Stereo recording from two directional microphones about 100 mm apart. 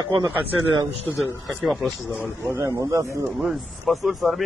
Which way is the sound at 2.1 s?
20° left (ahead or behind).